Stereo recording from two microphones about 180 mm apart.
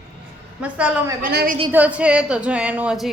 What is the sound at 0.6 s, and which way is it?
Speech, 10° right (ahead or behind).